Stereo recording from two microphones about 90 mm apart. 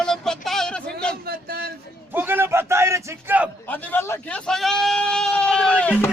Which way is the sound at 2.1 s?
25° right (ahead or behind).